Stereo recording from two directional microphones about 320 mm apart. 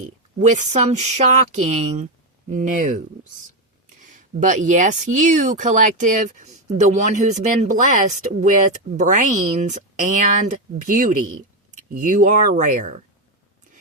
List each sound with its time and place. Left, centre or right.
0.3 s speech: right
4.0 s speech: right